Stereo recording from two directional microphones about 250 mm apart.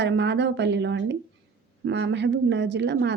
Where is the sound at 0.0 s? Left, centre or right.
Right.